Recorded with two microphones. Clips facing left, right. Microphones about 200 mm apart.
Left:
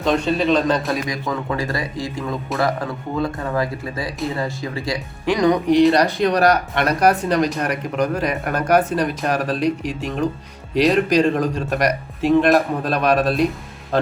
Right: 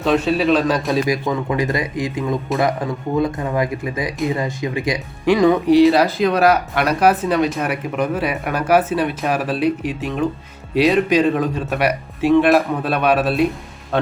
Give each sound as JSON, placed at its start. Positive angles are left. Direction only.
{"t": 0.0, "sound": "speech", "side_deg": -5}
{"t": 0.9, "sound": "speech", "side_deg": -25}